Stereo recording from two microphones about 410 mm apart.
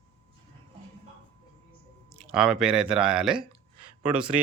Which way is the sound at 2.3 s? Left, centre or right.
Centre.